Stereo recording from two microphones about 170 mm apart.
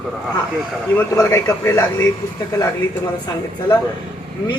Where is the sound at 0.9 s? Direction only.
10° left (ahead or behind).